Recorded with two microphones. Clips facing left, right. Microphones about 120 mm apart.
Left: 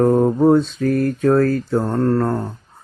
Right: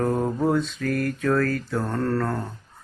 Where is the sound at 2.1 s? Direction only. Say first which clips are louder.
Left 6 dB; 25° left (ahead or behind).